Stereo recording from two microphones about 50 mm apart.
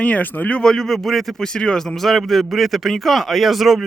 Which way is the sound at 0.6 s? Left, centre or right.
Centre.